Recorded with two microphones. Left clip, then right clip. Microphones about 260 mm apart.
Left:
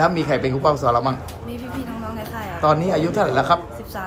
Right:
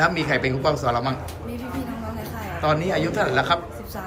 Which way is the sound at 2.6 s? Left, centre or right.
Centre.